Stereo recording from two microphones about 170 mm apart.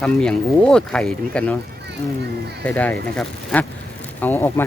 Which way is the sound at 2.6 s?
10° left (ahead or behind).